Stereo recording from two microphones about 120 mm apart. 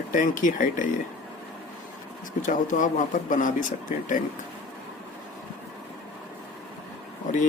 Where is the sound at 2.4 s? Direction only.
90° left.